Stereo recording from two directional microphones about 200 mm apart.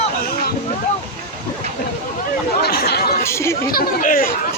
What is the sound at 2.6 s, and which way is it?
Chatter, 50° left (ahead or behind).